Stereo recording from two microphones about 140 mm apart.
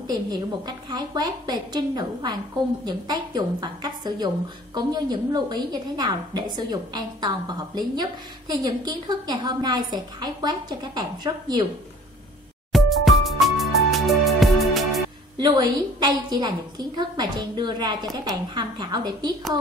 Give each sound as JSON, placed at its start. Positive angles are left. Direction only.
{"t": 0.1, "sound": "a woman's voice", "side_deg": -30}
{"t": 12.7, "sound": "music", "side_deg": 0}
{"t": 15.3, "sound": "a woman's voice", "side_deg": -30}